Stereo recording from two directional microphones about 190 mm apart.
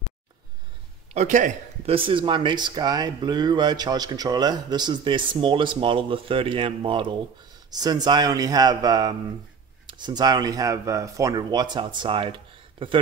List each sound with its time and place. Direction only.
1.1 s a man's voice: 40° right (ahead or behind)
2.0 s speech: 25° right (ahead or behind)